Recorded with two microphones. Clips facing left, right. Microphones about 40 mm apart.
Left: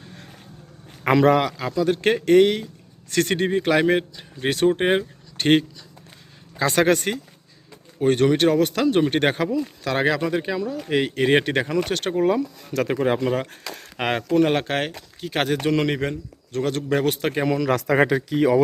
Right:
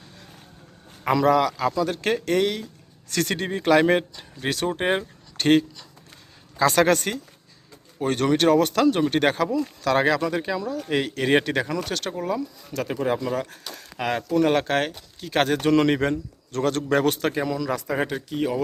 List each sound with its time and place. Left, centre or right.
1.0 s speech: left
1.7 s a man's voice: centre
2.0 s speech: left
3.6 s a man's voice: centre
4.4 s speech: left
6.6 s a man's voice: centre
8.9 s a man's voice: left
12.7 s speech: left
14.4 s a man's voice: centre
17.4 s speech: left
17.7 s speech: left